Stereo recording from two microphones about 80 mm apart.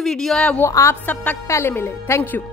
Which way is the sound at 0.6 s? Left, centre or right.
Left.